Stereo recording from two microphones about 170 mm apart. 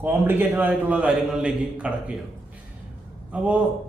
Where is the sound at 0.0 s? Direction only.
10° right (ahead or behind).